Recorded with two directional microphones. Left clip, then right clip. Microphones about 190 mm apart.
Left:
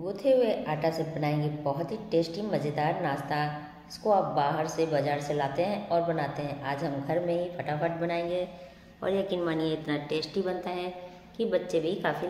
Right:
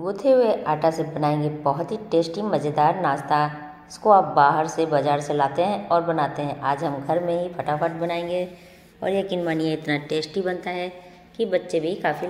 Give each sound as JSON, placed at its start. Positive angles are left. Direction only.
{"t": 0.2, "sound": "a woman's voice", "side_deg": -20}